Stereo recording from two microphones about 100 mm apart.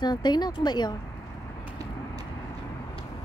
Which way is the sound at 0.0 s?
45° left (ahead or behind).